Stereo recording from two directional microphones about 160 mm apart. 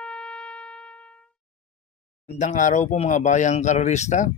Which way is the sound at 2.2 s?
50° left (ahead or behind).